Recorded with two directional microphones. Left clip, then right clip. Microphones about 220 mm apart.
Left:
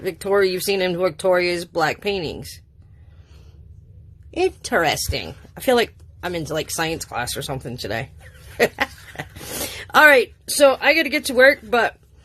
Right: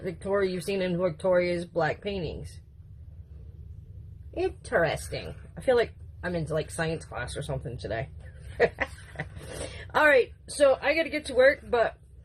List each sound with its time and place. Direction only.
0.0 s a woman's voice: 50° left (ahead or behind)
4.4 s a woman's voice: 45° left (ahead or behind)
8.5 s a sound: 50° left (ahead or behind)
9.7 s a woman's voice: 50° left (ahead or behind)